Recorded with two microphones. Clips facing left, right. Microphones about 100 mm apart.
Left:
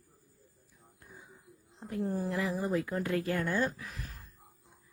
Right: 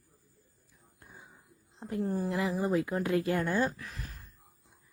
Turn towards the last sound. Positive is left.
turn(degrees=-20)  # may be behind; listen again after turning